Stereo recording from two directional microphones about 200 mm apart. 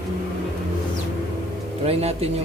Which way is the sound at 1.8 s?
30° right (ahead or behind).